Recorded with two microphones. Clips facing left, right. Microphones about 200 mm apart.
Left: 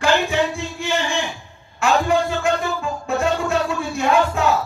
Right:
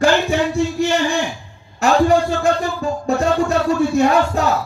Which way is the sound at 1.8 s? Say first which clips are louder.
Right 4 dB; 40° right (ahead or behind).